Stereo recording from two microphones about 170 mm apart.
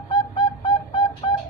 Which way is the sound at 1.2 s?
25° left (ahead or behind).